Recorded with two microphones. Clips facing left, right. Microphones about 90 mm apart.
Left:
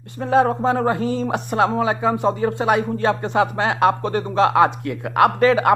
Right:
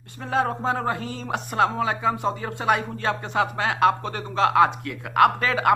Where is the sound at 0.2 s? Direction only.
15° left (ahead or behind).